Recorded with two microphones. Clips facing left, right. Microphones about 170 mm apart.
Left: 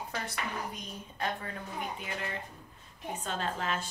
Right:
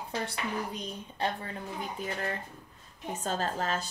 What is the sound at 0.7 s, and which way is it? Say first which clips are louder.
Speech: right 4 dB; 30° right (ahead or behind).